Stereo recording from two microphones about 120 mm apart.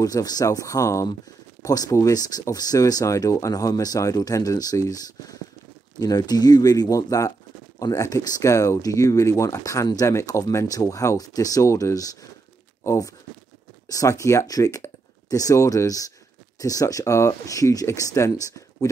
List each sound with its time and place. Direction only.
0.0 s speech: 30° left (ahead or behind)